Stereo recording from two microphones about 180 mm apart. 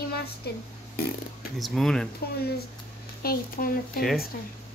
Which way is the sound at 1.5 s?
Centre (ahead or behind).